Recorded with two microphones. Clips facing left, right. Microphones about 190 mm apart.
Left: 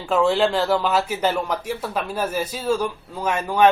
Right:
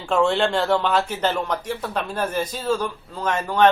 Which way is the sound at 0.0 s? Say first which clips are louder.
Left 1 dB; centre (ahead or behind).